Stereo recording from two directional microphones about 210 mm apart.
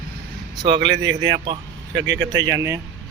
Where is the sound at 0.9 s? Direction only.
60° right (ahead or behind).